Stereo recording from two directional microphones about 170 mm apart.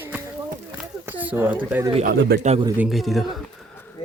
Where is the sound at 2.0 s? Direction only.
75° right (ahead or behind).